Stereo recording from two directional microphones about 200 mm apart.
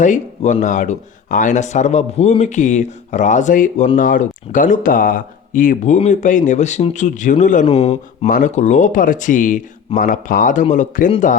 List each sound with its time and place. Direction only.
0.0 s speech: 40° left (ahead or behind)